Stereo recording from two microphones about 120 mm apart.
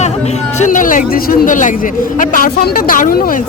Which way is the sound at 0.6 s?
90° left.